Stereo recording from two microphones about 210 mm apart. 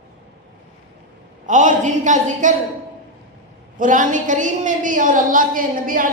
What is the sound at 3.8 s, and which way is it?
A woman's voice, 40° right (ahead or behind).